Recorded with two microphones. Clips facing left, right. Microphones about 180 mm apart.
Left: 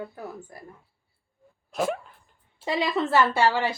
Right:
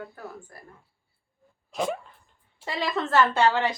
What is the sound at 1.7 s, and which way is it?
Speech, centre (ahead or behind).